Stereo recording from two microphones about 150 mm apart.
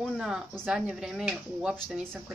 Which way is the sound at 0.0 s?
5° right (ahead or behind).